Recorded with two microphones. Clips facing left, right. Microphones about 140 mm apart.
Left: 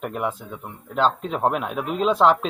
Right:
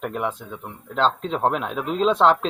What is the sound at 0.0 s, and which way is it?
Speech, 5° left (ahead or behind).